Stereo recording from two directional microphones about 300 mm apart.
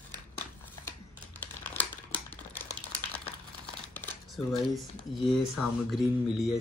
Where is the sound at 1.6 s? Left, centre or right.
Centre.